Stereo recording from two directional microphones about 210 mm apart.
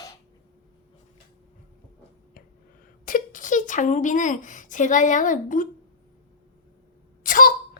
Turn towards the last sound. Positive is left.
turn(degrees=40)  # may be behind; listen again after turning